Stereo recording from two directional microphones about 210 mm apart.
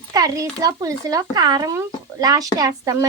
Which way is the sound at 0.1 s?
15° right (ahead or behind).